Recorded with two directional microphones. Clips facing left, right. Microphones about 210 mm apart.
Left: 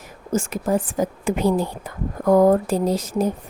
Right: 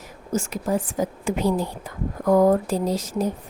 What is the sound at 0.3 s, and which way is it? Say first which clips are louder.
Speech: left 3 dB; 50° left (ahead or behind).